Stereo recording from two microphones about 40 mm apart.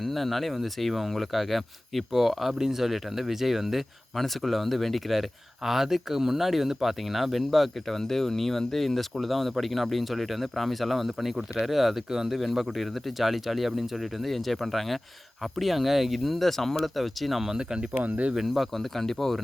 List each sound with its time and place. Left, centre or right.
0.0 s speech: centre
12.1 s a man's voice: centre
12.4 s speech: centre
17.6 s speech: right
17.9 s speech: right
18.3 s speech: centre